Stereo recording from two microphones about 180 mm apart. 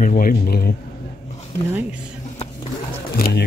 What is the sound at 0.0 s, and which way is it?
Speech, 50° left (ahead or behind).